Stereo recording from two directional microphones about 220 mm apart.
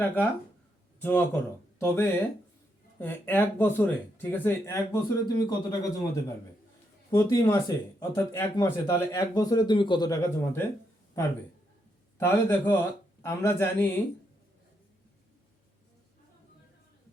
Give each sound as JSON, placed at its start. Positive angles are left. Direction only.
{"t": 0.9, "sound": "speech", "side_deg": 10}
{"t": 12.1, "sound": "a man's voice", "side_deg": 10}